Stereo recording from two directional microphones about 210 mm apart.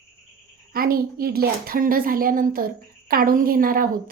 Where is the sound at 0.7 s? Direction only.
45° right (ahead or behind).